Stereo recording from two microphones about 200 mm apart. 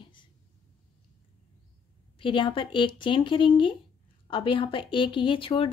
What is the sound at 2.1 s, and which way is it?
A woman's voice, 25° left (ahead or behind).